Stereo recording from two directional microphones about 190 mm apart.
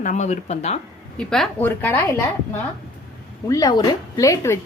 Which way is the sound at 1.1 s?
5° left (ahead or behind).